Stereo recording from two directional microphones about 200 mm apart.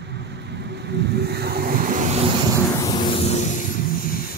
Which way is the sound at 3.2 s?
35° left (ahead or behind).